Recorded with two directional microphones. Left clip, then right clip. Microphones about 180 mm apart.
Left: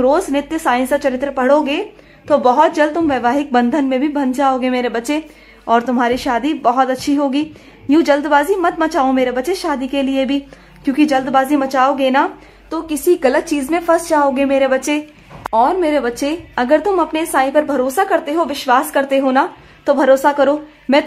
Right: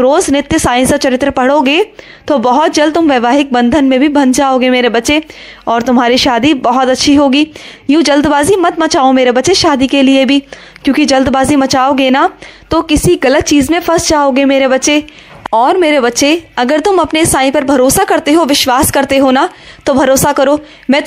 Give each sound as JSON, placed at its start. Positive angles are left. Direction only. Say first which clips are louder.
{"t": 0.0, "sound": "a woman's voice", "louder": "right 5 dB", "side_deg": -30}